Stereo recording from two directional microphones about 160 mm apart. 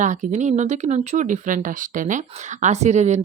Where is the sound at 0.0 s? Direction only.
50° right (ahead or behind).